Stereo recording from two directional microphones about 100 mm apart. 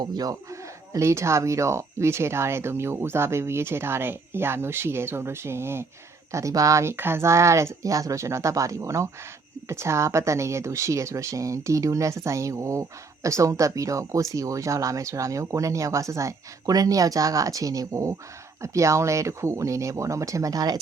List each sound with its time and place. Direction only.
0.0 s speech: 40° right (ahead or behind)
0.9 s speech: 30° right (ahead or behind)